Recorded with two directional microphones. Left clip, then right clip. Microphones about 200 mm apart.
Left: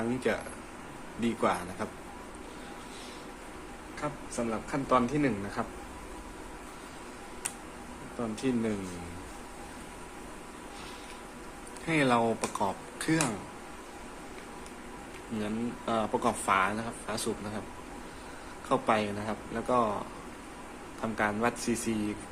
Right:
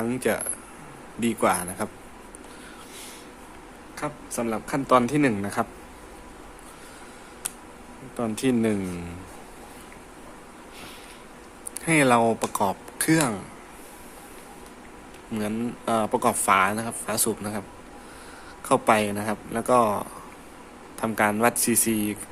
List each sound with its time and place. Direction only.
0.0 s speech: 40° right (ahead or behind)
4.0 s speech: 55° right (ahead or behind)
8.2 s speech: 50° right (ahead or behind)
11.9 s speech: 45° right (ahead or behind)
15.4 s speech: 40° right (ahead or behind)
18.7 s speech: 45° right (ahead or behind)
21.0 s speech: 50° right (ahead or behind)